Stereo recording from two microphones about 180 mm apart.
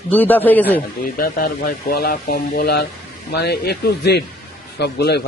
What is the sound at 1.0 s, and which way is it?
A man's voice, 55° left (ahead or behind).